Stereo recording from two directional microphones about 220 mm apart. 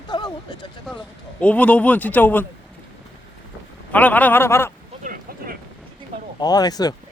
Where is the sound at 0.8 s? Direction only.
5° left (ahead or behind).